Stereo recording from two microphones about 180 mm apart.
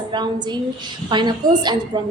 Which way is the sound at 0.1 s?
25° right (ahead or behind).